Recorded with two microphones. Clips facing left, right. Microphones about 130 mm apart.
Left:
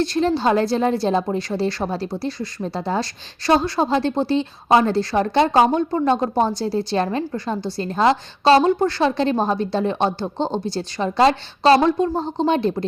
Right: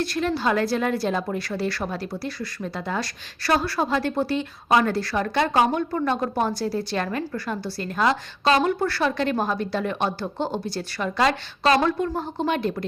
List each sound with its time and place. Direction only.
0.0 s a woman's voice: 25° left (ahead or behind)